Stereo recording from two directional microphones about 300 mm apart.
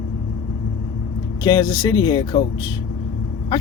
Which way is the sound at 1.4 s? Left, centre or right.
Centre.